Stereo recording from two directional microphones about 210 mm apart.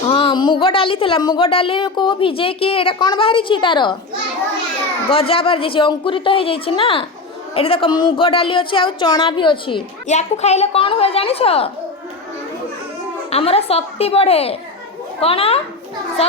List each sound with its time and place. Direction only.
0.1 s a woman's voice: 25° left (ahead or behind)
5.1 s a woman's voice: 25° left (ahead or behind)
13.3 s a woman's voice: 30° left (ahead or behind)